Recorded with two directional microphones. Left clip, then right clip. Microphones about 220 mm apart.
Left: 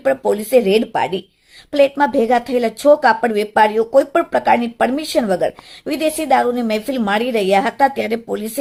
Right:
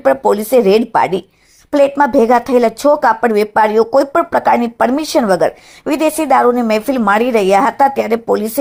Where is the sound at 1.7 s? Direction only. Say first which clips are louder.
Right 3 dB; 15° right (ahead or behind).